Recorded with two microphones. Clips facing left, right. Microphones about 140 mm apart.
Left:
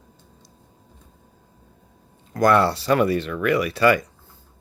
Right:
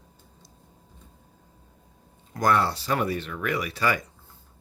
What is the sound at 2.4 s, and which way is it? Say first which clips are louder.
Speech: left 6 dB; 70° left (ahead or behind).